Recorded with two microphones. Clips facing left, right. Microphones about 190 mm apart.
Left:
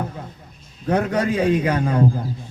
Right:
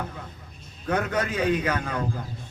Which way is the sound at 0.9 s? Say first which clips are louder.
Left 6 dB; 30° left (ahead or behind).